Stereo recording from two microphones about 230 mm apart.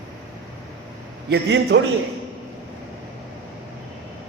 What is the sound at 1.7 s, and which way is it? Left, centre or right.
Speech, right.